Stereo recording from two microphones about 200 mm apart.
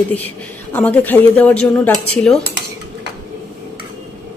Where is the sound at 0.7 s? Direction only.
10° left (ahead or behind).